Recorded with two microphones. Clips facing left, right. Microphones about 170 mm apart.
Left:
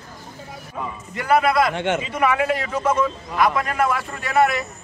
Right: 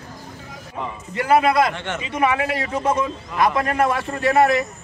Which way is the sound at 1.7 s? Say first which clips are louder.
Left 7 dB; 50° left (ahead or behind).